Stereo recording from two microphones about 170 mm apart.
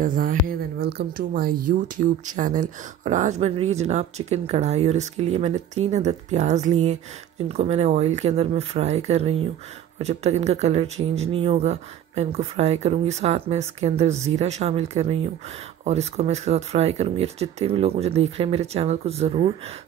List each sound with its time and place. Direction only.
0.0 s speech: 55° right (ahead or behind); by 19.5 s 35° right (ahead or behind)